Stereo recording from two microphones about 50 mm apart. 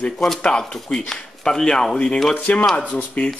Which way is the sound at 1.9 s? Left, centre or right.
Left.